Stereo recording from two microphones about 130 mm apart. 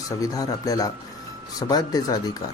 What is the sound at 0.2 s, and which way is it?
Speech, 25° left (ahead or behind).